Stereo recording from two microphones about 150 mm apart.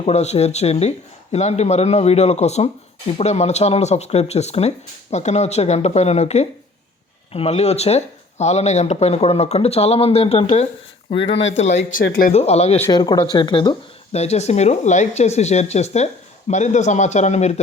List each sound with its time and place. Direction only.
0.0 s speech: 45° left (ahead or behind)
11.5 s speech: 50° left (ahead or behind)
11.9 s speech: 70° left (ahead or behind)
12.3 s speech: 45° left (ahead or behind)
12.9 s speech: 25° left (ahead or behind); by 17.6 s 50° left (ahead or behind)